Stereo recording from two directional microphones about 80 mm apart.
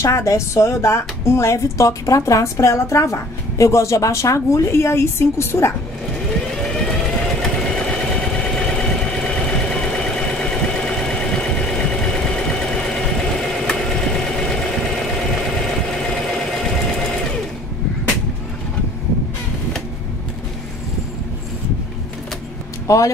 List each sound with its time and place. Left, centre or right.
0.0 s speech: left
6.5 s vehicle: centre
22.8 s speech: left